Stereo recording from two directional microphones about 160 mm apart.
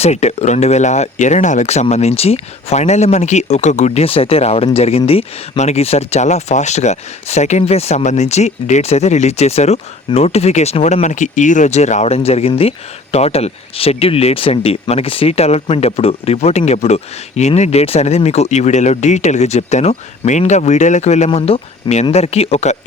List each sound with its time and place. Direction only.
0.0 s speech: 45° left (ahead or behind)